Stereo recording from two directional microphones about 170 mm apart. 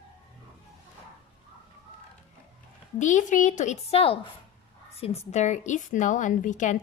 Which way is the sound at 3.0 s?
45° left (ahead or behind).